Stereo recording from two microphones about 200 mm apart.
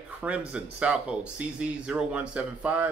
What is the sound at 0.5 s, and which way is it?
Speech, 5° right (ahead or behind).